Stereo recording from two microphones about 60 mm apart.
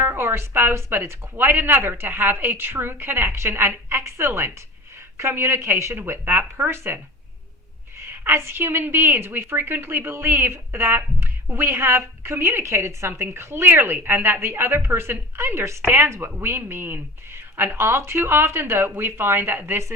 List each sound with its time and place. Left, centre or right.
0.0 s a woman's voice: right
8.1 s a woman's voice: right